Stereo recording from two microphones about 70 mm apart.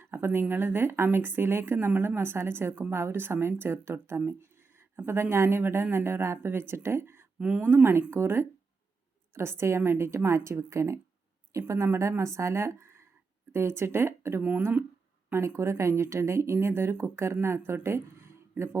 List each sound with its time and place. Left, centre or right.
0.0 s speech: right
7.3 s speech: centre
7.6 s speech: right
15.3 s speech: right
17.8 s a sound: right